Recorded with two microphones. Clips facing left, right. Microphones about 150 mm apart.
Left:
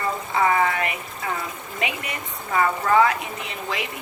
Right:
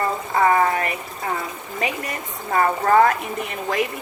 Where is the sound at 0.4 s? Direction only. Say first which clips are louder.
Right 3 dB; 40° right (ahead or behind).